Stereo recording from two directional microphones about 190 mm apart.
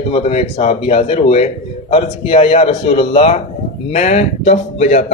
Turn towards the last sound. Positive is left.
turn(degrees=35)  # may be behind; listen again after turning